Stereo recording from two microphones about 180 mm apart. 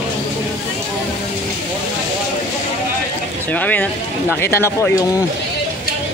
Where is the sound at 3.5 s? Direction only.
10° left (ahead or behind).